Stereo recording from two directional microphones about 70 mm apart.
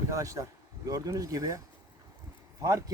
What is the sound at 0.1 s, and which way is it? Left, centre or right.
Speech, right.